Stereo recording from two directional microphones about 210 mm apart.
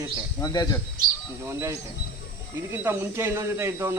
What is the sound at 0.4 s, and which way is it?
Speech, 20° left (ahead or behind).